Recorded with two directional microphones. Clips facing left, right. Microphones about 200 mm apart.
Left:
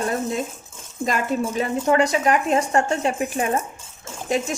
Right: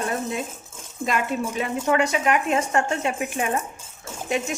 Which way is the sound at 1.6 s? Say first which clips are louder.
Left 3 dB; 35° left (ahead or behind).